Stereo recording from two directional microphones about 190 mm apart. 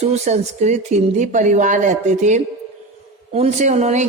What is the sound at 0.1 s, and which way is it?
A woman's voice, 35° right (ahead or behind).